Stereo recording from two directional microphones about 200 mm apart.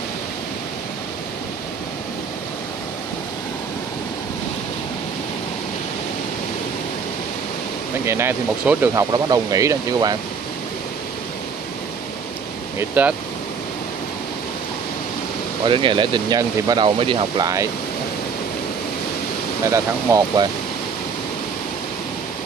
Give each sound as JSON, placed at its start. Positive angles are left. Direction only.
{"t": 8.0, "sound": "speech", "side_deg": -10}
{"t": 12.7, "sound": "speech", "side_deg": -10}
{"t": 15.6, "sound": "speech", "side_deg": -25}
{"t": 19.6, "sound": "speech", "side_deg": -15}